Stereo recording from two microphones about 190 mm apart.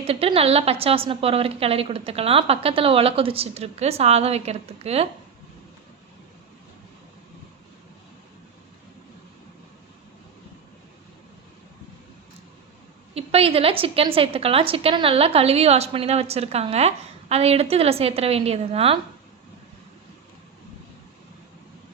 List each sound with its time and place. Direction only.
0.0 s a woman's voice: 30° right (ahead or behind)
13.1 s a woman's voice: 30° right (ahead or behind)